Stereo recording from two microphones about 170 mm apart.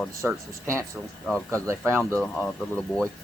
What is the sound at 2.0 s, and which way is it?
Speech, 5° left (ahead or behind).